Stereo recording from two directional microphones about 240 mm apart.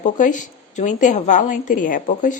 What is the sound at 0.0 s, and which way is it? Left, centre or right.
A woman's voice, left.